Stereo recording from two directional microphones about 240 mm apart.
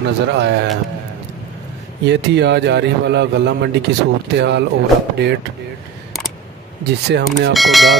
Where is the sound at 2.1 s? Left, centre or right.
Right.